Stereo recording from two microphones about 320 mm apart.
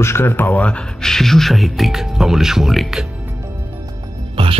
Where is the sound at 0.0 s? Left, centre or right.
Centre.